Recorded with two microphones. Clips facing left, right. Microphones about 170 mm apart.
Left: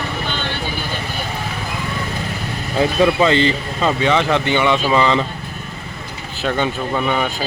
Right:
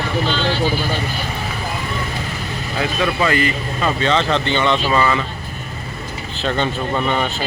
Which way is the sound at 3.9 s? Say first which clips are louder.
Left 2 dB; 15° left (ahead or behind).